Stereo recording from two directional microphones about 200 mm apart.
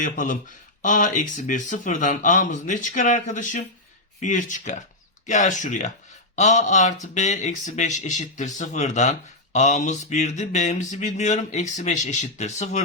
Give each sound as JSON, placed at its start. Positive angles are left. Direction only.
{"t": 0.0, "sound": "speech", "side_deg": 40}